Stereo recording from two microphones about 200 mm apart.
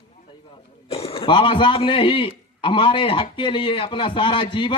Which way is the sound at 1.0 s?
25° left (ahead or behind).